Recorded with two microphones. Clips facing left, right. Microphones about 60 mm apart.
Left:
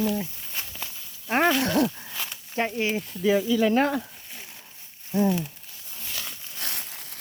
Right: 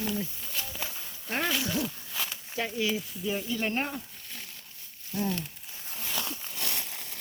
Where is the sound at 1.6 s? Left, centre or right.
Left.